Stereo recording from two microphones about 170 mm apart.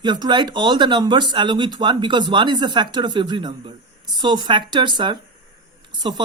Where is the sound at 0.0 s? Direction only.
25° right (ahead or behind).